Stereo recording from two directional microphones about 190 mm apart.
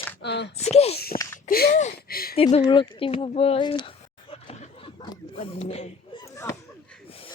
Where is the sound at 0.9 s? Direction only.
55° left (ahead or behind).